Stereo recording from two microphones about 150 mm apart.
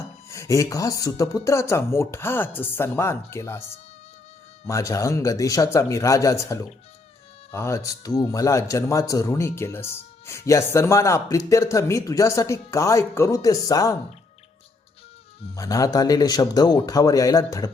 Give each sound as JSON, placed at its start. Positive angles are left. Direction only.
{"t": 0.3, "sound": "speech", "side_deg": 20}
{"t": 15.5, "sound": "speech", "side_deg": 25}